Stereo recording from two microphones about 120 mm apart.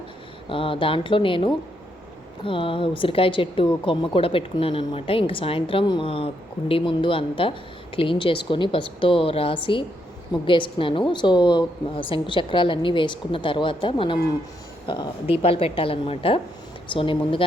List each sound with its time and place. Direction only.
0.4 s speech: 45° left (ahead or behind)
15.3 s speech: 55° left (ahead or behind)